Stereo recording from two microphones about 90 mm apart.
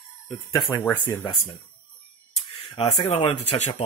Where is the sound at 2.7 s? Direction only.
75° left (ahead or behind).